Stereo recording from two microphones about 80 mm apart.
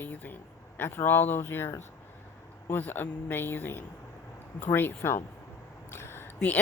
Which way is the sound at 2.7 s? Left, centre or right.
Left.